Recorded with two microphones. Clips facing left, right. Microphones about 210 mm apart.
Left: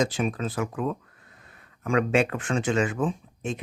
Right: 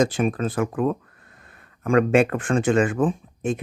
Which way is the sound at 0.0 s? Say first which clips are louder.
Right 5 dB; 50° right (ahead or behind).